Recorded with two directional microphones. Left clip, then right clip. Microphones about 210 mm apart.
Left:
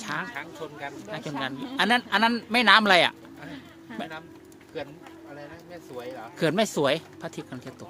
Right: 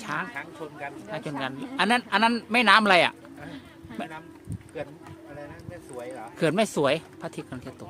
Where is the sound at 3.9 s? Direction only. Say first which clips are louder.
Even; 25° left (ahead or behind).